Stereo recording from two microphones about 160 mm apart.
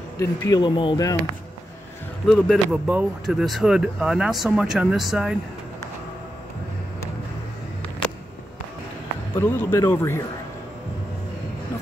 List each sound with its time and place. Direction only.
0.2 s speech: 20° left (ahead or behind)
2.2 s speech: 5° left (ahead or behind)
9.4 s speech: 10° left (ahead or behind)